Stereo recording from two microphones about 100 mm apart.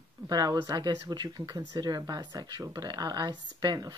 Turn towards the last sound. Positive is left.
turn(degrees=-40)  # may be behind; listen again after turning